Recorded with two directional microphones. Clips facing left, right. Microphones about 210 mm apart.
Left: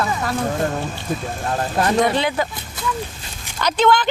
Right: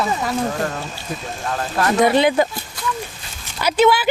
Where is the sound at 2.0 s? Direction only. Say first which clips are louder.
Right 5 dB; 15° right (ahead or behind).